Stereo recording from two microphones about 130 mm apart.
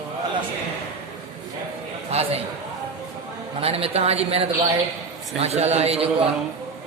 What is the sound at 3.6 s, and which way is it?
Speech, 50° right (ahead or behind).